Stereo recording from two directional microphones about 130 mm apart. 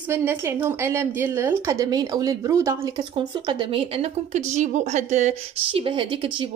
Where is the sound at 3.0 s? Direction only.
35° right (ahead or behind); by 5.3 s 65° right (ahead or behind).